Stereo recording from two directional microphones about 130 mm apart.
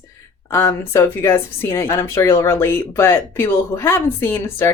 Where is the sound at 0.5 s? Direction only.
20° left (ahead or behind).